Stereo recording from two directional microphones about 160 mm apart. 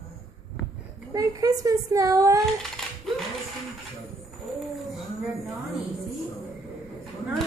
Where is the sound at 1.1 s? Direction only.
20° right (ahead or behind).